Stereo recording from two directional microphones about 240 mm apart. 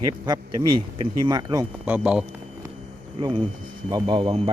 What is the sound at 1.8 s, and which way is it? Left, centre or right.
Speech, centre.